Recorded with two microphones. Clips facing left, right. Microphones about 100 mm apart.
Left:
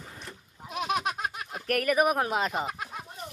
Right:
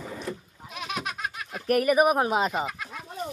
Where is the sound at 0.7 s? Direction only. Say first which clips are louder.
Left 4 dB; 40° left (ahead or behind).